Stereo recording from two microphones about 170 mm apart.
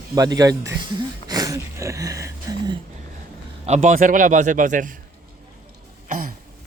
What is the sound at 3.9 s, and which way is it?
Speech, 50° right (ahead or behind).